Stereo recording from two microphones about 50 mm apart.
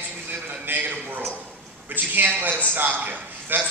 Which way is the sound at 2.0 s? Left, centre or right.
Right.